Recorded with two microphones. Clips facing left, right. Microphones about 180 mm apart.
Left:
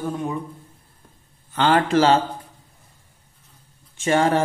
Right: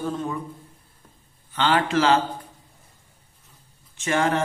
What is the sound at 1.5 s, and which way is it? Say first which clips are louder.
Speech: left 4 dB; 45° left (ahead or behind).